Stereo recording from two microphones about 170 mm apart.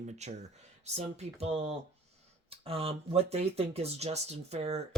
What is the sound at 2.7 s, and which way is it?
Speech, 35° right (ahead or behind).